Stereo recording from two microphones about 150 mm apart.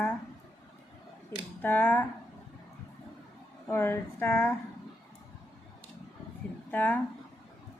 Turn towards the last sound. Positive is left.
turn(degrees=10)  # may be behind; listen again after turning